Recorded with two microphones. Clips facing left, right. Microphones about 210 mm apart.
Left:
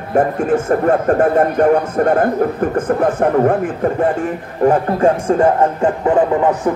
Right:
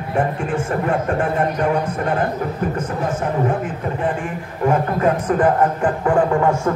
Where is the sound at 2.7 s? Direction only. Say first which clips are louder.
Left 7 dB; 55° left (ahead or behind).